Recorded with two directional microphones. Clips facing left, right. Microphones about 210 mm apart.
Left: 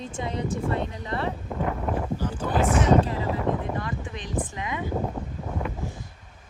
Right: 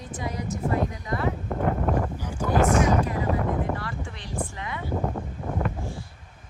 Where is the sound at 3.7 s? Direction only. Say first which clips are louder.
Left 3 dB; 20° left (ahead or behind).